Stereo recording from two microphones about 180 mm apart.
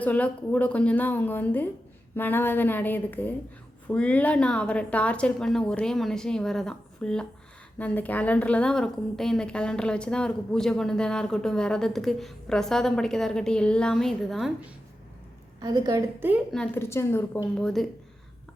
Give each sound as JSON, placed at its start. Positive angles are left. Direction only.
{"t": 0.0, "sound": "a woman's voice", "side_deg": 10}
{"t": 15.6, "sound": "a woman's voice", "side_deg": -20}
{"t": 16.5, "sound": "a woman's voice", "side_deg": 10}